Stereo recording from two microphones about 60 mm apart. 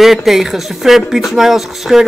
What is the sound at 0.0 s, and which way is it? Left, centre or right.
Speech, centre.